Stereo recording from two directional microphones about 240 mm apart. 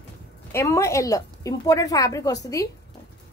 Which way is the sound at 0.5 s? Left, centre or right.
Centre.